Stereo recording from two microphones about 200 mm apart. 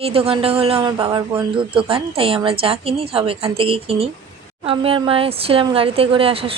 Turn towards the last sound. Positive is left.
turn(degrees=-30)  # may be behind; listen again after turning